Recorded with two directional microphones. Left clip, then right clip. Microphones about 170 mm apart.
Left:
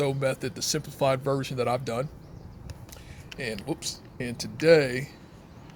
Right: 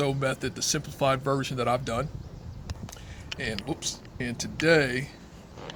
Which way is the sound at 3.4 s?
25° left (ahead or behind).